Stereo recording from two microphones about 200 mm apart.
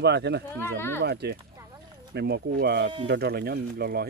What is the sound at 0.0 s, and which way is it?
Speech, 55° right (ahead or behind).